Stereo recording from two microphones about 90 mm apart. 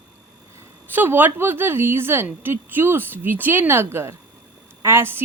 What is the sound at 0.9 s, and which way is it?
Speech, 20° right (ahead or behind).